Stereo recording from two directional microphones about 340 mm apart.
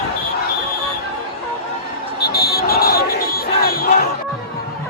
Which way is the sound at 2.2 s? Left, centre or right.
Left.